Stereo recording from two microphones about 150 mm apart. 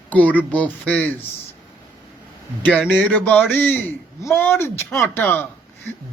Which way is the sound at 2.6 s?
10° left (ahead or behind).